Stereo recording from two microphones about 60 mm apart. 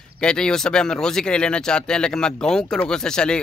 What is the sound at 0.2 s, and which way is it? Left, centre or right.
Speech, centre.